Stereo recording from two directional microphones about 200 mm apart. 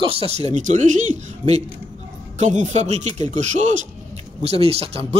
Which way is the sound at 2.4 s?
35° right (ahead or behind).